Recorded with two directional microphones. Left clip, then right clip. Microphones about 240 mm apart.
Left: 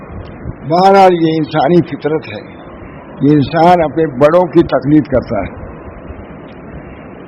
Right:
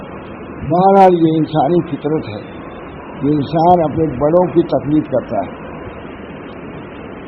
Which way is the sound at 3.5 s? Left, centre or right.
Left.